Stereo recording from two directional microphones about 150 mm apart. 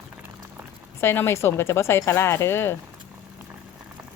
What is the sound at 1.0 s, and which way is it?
Speech, 15° left (ahead or behind).